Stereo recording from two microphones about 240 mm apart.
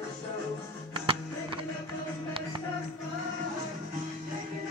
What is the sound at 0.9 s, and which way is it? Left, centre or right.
Music, right.